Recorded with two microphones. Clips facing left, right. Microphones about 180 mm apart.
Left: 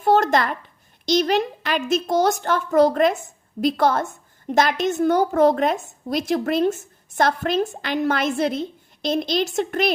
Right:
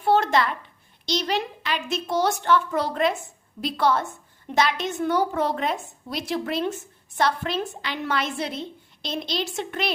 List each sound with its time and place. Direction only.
0.0 s a woman's voice: 45° left (ahead or behind)